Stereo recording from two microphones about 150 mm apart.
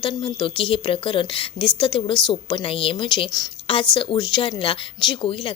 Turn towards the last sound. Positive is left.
turn(degrees=35)  # may be behind; listen again after turning